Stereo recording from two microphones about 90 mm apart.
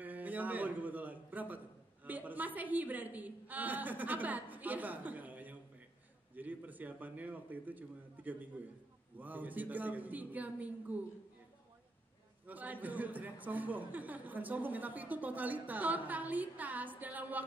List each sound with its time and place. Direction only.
0.0 s a man's voice: 20° right (ahead or behind)
12.4 s a man's voice: 20° right (ahead or behind)